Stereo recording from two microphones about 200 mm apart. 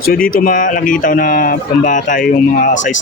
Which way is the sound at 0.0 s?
45° left (ahead or behind).